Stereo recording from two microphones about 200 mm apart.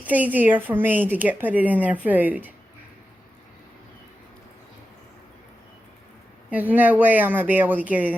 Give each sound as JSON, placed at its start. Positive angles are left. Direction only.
{"t": 0.1, "sound": "a woman's voice", "side_deg": -10}
{"t": 6.5, "sound": "a woman's voice", "side_deg": -10}